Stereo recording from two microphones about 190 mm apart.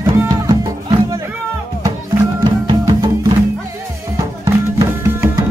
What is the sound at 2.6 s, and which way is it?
Music, 20° right (ahead or behind).